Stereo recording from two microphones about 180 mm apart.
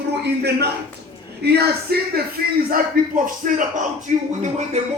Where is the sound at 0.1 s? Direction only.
65° right (ahead or behind).